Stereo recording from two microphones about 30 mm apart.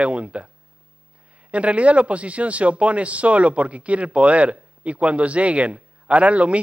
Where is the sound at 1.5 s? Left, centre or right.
Right.